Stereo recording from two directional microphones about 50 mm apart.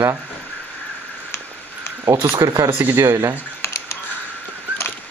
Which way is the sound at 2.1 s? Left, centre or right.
Right.